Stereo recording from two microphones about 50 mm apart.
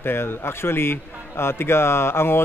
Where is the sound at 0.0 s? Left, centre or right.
Left.